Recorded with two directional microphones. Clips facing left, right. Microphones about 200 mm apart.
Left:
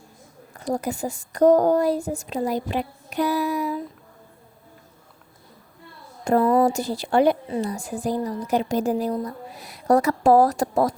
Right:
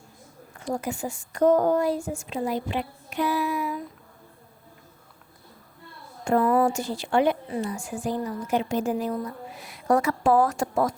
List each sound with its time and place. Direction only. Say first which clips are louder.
0.6 s a woman's voice: left 3 dB; 40° left (ahead or behind)
6.2 s a woman's voice: left 3 dB; 35° left (ahead or behind)